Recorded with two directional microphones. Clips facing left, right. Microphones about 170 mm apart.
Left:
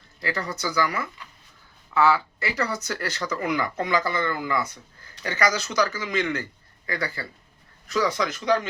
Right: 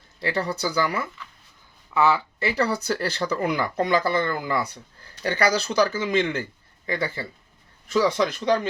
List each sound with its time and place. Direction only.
0.2 s speech: 30° right (ahead or behind)